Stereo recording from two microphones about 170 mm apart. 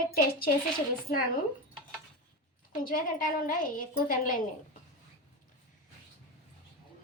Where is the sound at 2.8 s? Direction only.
55° left (ahead or behind).